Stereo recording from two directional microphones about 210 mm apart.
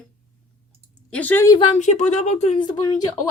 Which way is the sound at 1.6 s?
35° left (ahead or behind).